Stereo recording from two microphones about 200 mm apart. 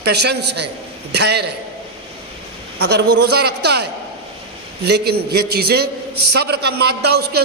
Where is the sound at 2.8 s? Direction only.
55° right (ahead or behind).